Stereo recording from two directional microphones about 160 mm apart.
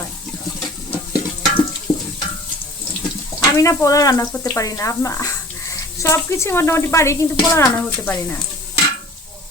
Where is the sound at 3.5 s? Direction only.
20° left (ahead or behind).